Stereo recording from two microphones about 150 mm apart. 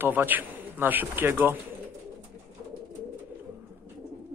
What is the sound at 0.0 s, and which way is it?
A man's voice, 10° right (ahead or behind).